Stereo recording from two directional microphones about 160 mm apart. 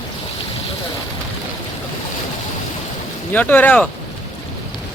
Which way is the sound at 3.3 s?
10° left (ahead or behind).